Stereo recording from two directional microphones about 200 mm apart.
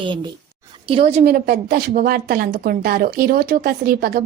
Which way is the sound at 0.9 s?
30° right (ahead or behind).